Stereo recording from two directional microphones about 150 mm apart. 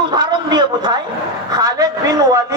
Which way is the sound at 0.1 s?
30° right (ahead or behind).